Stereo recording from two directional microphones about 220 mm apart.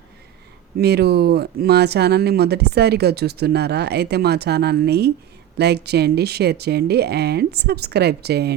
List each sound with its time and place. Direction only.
0.8 s speech: 45° right (ahead or behind)